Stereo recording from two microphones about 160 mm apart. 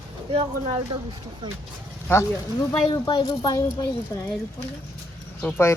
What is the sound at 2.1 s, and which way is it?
Speech, 15° left (ahead or behind).